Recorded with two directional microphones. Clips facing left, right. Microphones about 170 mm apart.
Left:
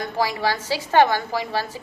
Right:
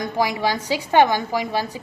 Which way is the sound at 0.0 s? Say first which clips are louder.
Right 2 dB; 15° right (ahead or behind).